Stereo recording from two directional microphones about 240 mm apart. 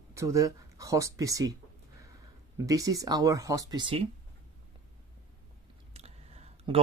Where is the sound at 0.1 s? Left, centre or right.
Centre.